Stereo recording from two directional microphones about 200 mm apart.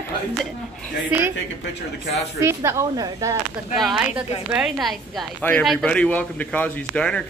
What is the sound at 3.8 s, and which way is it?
Speech, centre (ahead or behind).